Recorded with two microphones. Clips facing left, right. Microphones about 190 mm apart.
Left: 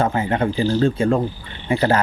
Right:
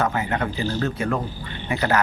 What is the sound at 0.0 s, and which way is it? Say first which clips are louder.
Speech: left 4 dB; 30° left (ahead or behind).